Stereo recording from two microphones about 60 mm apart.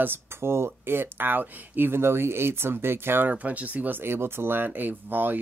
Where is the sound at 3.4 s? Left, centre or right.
Right.